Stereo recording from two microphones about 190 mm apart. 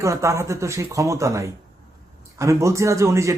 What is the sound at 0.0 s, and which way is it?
A man's voice, 15° right (ahead or behind).